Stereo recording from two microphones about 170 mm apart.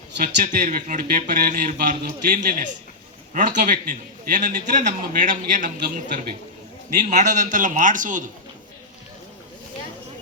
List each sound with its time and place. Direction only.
0.2 s speech: 50° right (ahead or behind)
7.1 s speech: 45° right (ahead or behind)